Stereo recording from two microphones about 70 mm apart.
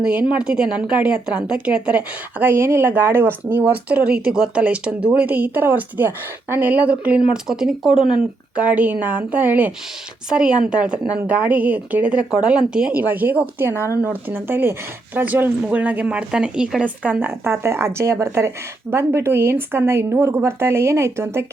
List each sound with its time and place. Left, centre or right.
0.0 s a woman's voice: centre
7.4 s a woman's voice: centre
8.5 s a woman's voice: centre
13.7 s speech: left
14.0 s speech: right